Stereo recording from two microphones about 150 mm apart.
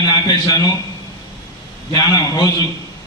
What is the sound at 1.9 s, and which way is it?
Speech, 25° left (ahead or behind).